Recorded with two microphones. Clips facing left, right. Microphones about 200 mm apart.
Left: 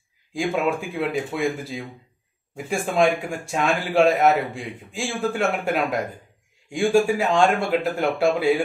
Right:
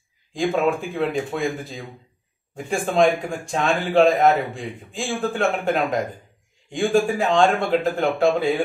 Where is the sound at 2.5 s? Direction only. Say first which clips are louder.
Right 2 dB; 5° left (ahead or behind).